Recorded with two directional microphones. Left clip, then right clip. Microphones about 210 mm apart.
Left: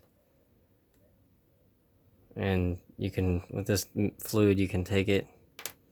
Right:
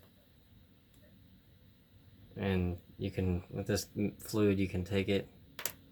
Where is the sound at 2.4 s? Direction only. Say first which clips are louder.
Left 5 dB; 50° left (ahead or behind).